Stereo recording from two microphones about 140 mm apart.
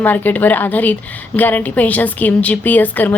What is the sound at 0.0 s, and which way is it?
A woman's voice, 15° left (ahead or behind).